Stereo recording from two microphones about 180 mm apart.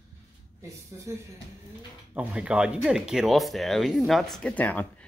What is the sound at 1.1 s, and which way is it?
Speech, 15° right (ahead or behind).